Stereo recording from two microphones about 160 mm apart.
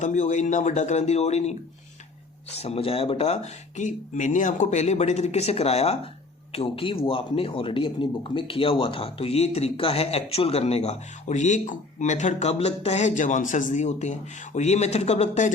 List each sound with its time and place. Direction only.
0.0 s speech: 50° left (ahead or behind)
2.6 s a man's voice: 40° left (ahead or behind)